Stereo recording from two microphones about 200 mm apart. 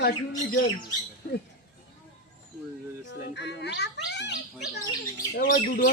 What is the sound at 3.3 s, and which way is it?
A child's voice, 60° left (ahead or behind).